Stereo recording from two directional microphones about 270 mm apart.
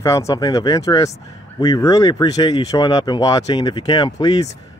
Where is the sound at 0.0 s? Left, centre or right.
Centre.